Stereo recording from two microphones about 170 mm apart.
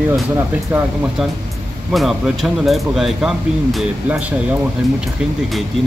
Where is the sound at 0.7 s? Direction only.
10° right (ahead or behind).